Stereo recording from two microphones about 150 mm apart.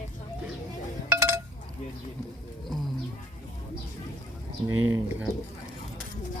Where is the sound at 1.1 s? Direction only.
15° right (ahead or behind).